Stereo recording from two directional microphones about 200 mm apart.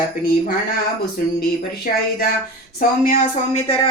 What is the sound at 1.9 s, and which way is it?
A woman's voice, 45° left (ahead or behind).